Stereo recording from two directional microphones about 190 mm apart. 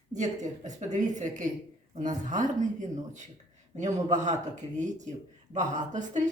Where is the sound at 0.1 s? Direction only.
40° right (ahead or behind).